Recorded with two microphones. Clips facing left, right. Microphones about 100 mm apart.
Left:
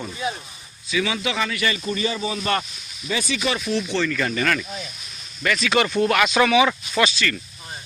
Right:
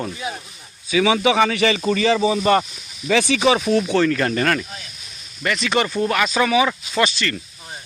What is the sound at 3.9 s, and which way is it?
Speech, 50° right (ahead or behind).